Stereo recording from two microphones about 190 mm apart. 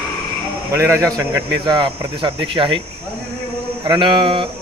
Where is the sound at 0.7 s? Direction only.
15° right (ahead or behind).